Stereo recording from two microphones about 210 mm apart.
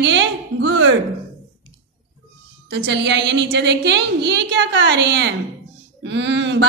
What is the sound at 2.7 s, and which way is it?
Speech, 55° right (ahead or behind).